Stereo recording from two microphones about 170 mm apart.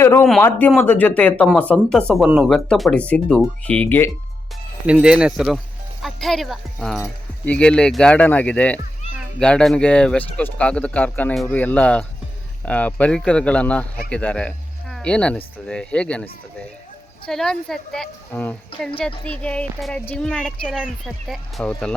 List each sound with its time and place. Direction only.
0.0 s a man's voice: 15° left (ahead or behind)
4.9 s a woman's voice: 5° right (ahead or behind)
17.2 s a woman's voice: 5° left (ahead or behind)